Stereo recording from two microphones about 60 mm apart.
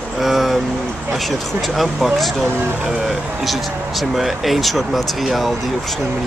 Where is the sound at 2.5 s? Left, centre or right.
Right.